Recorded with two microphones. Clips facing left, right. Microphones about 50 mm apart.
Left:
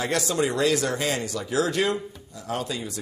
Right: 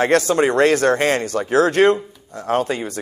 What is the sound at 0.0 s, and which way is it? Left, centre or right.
A man's voice, right.